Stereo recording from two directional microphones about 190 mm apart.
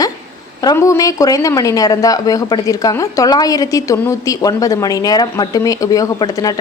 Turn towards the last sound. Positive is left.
turn(degrees=20)  # may be behind; listen again after turning